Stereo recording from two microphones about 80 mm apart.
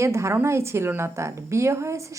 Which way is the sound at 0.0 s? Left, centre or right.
Right.